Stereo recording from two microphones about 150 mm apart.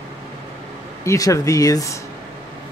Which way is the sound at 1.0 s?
20° left (ahead or behind).